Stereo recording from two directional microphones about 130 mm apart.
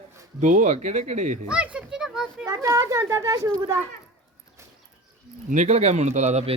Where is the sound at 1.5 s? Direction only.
10° right (ahead or behind).